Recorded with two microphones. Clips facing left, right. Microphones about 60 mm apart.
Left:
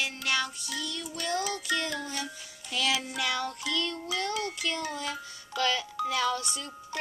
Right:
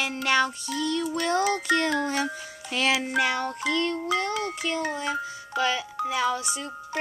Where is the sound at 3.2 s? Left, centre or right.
Right.